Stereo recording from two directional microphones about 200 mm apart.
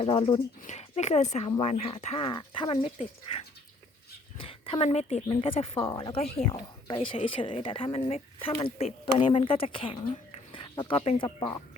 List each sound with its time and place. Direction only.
0.0 s speech: 30° left (ahead or behind)
4.4 s speech: 25° left (ahead or behind)
11.3 s speech: 15° left (ahead or behind)